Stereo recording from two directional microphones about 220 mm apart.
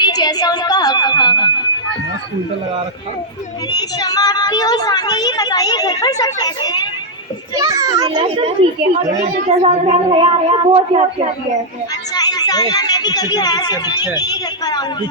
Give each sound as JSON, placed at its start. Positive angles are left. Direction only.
{"t": 0.0, "sound": "a woman's voice", "side_deg": 20}
{"t": 3.7, "sound": "a woman's voice", "side_deg": 20}
{"t": 7.5, "sound": "a child's voice", "side_deg": -15}
{"t": 9.5, "sound": "speech", "side_deg": -30}
{"t": 12.1, "sound": "a woman's voice", "side_deg": 20}